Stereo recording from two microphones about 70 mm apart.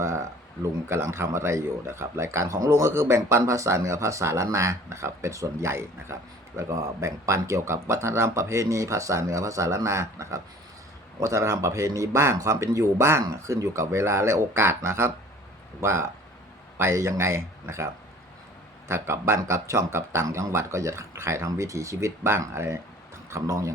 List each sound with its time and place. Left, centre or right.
0.0 s speech: right
6.6 s a man's voice: right